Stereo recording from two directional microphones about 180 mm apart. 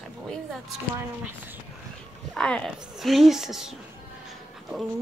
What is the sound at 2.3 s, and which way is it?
A woman's voice, 5° left (ahead or behind).